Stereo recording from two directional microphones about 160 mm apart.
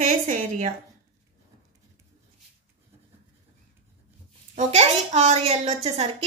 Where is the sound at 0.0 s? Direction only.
50° right (ahead or behind).